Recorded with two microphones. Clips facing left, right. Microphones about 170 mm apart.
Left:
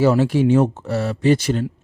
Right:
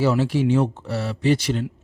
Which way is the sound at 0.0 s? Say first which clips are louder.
Left 4 dB; 50° left (ahead or behind).